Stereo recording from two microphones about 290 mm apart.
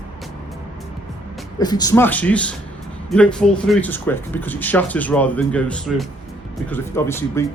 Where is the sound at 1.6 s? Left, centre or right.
Centre.